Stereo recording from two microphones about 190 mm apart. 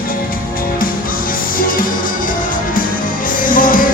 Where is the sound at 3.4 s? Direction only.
45° left (ahead or behind).